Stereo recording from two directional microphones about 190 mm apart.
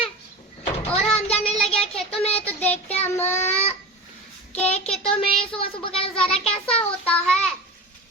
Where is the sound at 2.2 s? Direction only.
30° left (ahead or behind).